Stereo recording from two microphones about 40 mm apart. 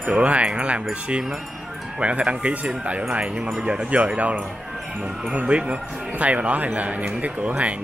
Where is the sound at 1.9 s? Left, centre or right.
Right.